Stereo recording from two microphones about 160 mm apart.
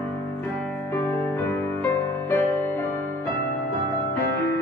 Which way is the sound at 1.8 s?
15° left (ahead or behind).